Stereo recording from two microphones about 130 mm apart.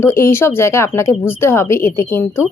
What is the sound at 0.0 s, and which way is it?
Speech, 20° left (ahead or behind).